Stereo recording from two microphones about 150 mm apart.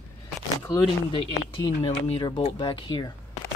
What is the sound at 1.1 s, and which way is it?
Speech, 30° left (ahead or behind).